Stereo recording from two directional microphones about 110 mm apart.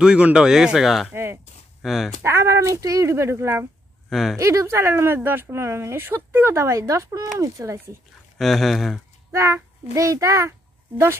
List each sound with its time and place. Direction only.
0.0 s speech: 10° right (ahead or behind)
1.1 s speech: 20° right (ahead or behind)
1.8 s speech: centre (ahead or behind)
2.2 s speech: 25° right (ahead or behind)
4.1 s speech: centre (ahead or behind)
4.4 s speech: 25° right (ahead or behind)
8.4 s speech: centre (ahead or behind)
9.3 s a child's voice: 25° right (ahead or behind)